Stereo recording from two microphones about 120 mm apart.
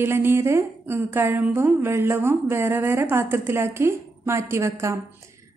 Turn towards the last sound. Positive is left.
turn(degrees=-20)  # may be behind; listen again after turning